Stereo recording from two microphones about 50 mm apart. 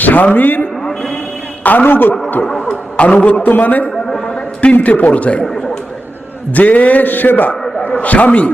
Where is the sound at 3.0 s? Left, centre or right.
Centre.